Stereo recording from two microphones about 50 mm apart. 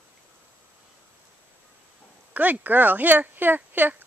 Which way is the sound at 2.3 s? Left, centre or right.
Right.